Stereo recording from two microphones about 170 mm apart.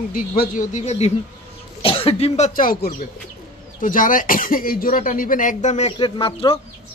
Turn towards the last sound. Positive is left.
turn(degrees=30)  # may be behind; listen again after turning